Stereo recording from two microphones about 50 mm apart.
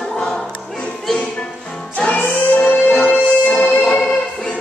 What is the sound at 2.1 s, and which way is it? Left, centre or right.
Music, left.